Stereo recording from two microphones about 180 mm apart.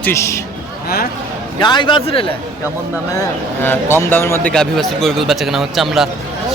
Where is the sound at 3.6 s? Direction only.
10° left (ahead or behind).